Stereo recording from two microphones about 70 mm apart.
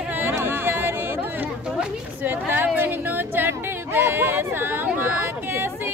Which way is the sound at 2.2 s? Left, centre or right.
Right.